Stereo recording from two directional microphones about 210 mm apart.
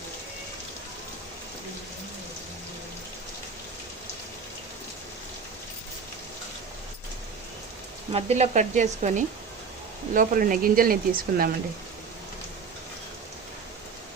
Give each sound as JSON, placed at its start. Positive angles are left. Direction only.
{"t": 8.1, "sound": "speech", "side_deg": -30}